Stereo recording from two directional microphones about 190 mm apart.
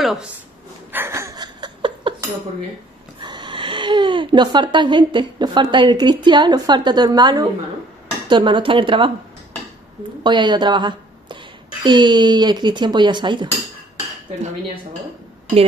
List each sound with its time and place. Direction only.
0.0 s speech: centre (ahead or behind)
0.9 s a sound: 15° right (ahead or behind)
3.2 s speech: 25° right (ahead or behind)
10.2 s a woman's voice: 25° right (ahead or behind)